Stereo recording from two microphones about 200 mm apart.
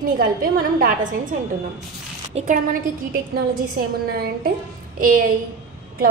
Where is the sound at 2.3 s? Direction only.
40° right (ahead or behind).